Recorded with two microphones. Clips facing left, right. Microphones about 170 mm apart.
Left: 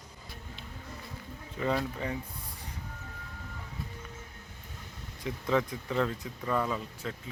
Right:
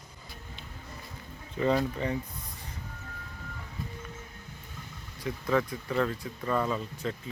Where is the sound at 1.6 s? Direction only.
Centre (ahead or behind).